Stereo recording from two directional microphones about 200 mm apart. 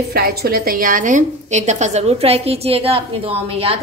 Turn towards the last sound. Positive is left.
turn(degrees=-30)  # may be behind; listen again after turning